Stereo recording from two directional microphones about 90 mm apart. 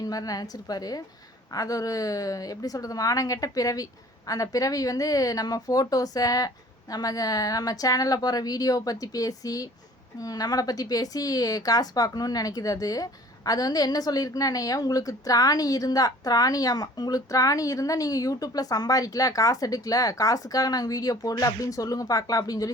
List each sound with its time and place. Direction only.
0.0 s a woman's voice: 45° left (ahead or behind)